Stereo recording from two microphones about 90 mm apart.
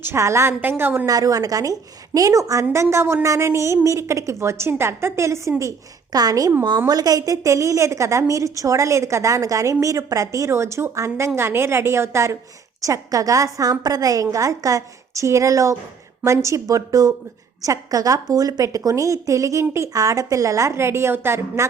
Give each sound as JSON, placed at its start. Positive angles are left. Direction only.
{"t": 0.0, "sound": "a woman's voice", "side_deg": -30}
{"t": 1.0, "sound": "a woman's voice", "side_deg": -40}